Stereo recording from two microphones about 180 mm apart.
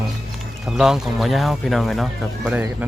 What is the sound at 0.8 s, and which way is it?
Speech, 5° right (ahead or behind).